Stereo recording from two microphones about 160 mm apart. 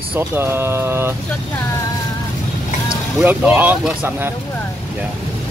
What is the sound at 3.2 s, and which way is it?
Speech, 10° right (ahead or behind).